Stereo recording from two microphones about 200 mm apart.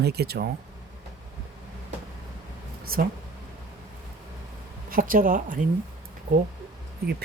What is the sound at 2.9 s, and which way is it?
Speech, 45° right (ahead or behind).